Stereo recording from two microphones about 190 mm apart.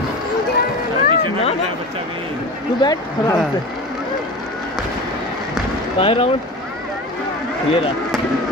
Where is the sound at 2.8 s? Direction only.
20° left (ahead or behind).